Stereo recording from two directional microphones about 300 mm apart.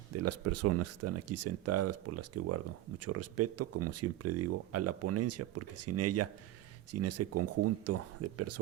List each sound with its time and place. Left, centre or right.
0.1 s speech: right